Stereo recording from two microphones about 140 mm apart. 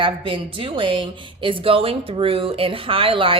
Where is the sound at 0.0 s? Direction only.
40° right (ahead or behind).